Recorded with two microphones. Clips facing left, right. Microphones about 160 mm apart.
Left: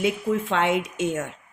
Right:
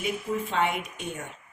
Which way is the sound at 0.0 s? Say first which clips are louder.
Left 6 dB; 90° left.